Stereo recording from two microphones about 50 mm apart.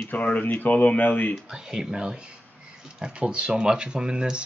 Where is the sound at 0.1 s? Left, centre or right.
Left.